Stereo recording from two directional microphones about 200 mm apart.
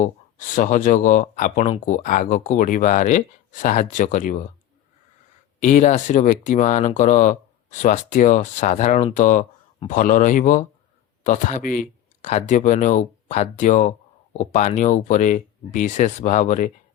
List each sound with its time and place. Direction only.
0.0 s speech: 40° left (ahead or behind)
5.5 s speech: 35° left (ahead or behind)